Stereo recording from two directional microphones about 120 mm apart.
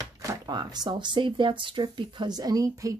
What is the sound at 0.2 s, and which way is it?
Speech, 30° right (ahead or behind).